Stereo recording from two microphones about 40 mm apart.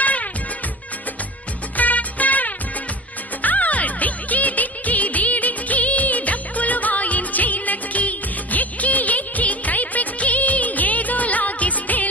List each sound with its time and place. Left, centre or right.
0.0 s music: left
1.8 s music: left